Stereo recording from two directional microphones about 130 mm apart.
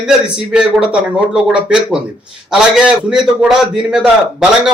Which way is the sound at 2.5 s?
5° right (ahead or behind).